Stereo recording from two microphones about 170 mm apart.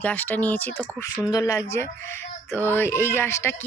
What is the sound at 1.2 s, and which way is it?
Speech, 20° left (ahead or behind).